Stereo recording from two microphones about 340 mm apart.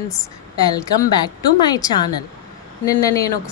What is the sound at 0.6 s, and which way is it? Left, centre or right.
Speech, centre.